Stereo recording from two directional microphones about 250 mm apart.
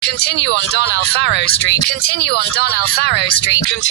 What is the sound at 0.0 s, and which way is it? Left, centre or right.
Speech, left.